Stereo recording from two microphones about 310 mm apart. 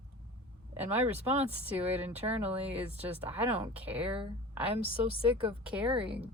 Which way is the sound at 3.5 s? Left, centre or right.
Centre.